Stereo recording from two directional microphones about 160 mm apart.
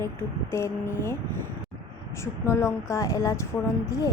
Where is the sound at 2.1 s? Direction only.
15° left (ahead or behind).